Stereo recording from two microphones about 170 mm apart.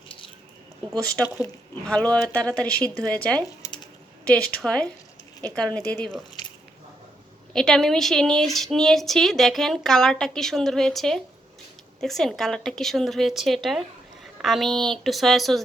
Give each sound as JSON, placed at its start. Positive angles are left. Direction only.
{"t": 1.8, "sound": "speech", "side_deg": 5}
{"t": 3.6, "sound": "typing", "side_deg": 20}
{"t": 4.5, "sound": "speech", "side_deg": 5}
{"t": 7.5, "sound": "speech", "side_deg": 5}